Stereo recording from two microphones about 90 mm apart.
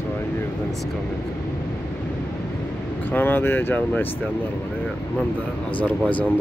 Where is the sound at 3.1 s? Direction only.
25° left (ahead or behind).